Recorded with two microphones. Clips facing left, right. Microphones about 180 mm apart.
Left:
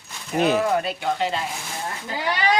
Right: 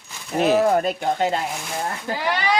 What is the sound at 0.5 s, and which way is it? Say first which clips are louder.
Speech: right 4 dB; 40° right (ahead or behind).